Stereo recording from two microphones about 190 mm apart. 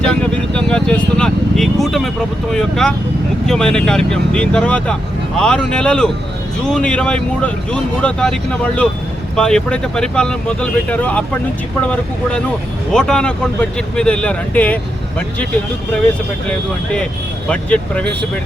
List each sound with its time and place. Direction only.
0.0 s speech: 5° left (ahead or behind)
12.9 s speech: 5° left (ahead or behind)
16.5 s speech: 5° left (ahead or behind)